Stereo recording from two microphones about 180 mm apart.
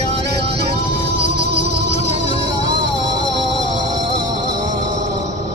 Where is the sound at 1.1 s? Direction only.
70° right (ahead or behind).